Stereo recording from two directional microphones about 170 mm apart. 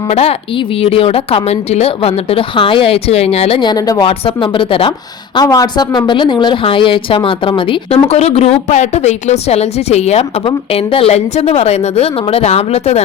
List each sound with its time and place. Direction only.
0.1 s a woman's voice: 35° left (ahead or behind)